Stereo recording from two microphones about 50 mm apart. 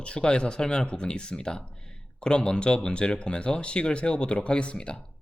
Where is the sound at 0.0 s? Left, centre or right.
Centre.